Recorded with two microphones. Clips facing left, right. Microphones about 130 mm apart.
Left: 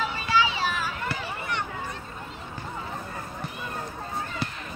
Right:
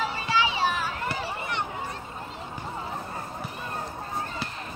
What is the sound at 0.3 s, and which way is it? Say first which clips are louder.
Children playing: even; 20° right (ahead or behind).